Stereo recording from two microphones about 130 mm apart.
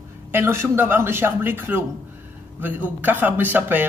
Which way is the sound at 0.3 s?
20° right (ahead or behind).